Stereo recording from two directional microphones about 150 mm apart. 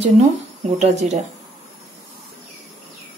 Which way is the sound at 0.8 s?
50° right (ahead or behind).